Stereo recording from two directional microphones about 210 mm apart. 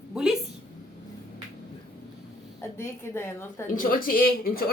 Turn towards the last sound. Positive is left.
turn(degrees=45)  # may be behind; listen again after turning